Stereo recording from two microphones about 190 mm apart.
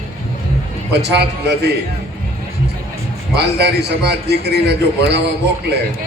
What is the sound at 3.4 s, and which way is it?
A man's voice, 60° right (ahead or behind).